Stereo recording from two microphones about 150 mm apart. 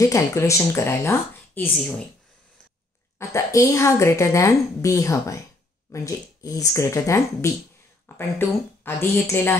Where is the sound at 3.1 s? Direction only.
20° left (ahead or behind).